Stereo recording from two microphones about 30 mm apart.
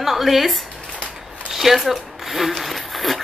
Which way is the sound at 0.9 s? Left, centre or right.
Left.